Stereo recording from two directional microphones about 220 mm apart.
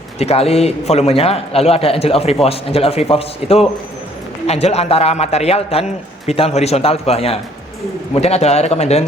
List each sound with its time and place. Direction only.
0.2 s a man's voice: 30° left (ahead or behind)